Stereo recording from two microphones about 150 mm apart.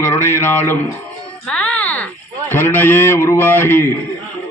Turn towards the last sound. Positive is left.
turn(degrees=15)  # may be behind; listen again after turning